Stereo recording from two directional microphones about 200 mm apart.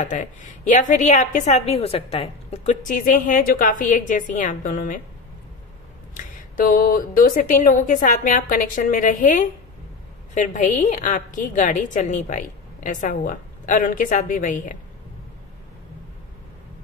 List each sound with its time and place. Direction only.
0.0 s a woman's voice: 40° left (ahead or behind)
6.1 s a woman's voice: 40° left (ahead or behind)